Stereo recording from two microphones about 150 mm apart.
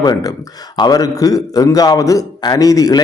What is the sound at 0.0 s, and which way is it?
A man's voice, 25° left (ahead or behind).